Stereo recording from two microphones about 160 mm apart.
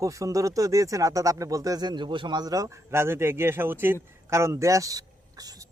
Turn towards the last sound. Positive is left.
turn(degrees=-25)  # may be behind; listen again after turning